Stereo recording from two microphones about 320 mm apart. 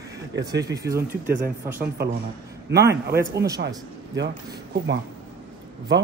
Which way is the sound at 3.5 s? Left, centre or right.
Right.